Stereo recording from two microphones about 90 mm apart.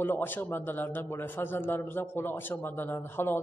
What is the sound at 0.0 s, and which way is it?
A man's voice, 20° left (ahead or behind).